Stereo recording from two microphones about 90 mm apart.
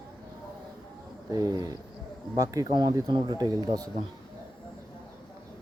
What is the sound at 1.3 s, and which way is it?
Speech, 40° right (ahead or behind).